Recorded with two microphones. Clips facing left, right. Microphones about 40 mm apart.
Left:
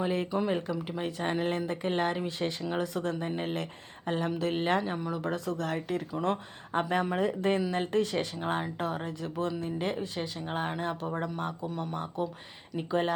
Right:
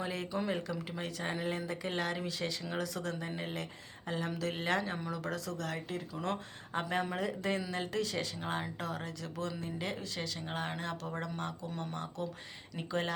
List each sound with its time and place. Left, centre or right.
0.0 s speech: left
1.2 s speech: left
4.4 s speech: left
6.1 s speech: left
10.2 s speech: left
11.7 s speech: centre
11.9 s speech: centre